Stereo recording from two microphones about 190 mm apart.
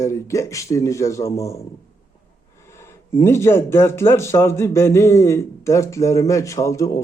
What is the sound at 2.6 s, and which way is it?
Speech, 15° left (ahead or behind).